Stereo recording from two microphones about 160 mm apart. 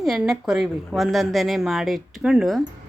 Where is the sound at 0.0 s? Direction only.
5° right (ahead or behind).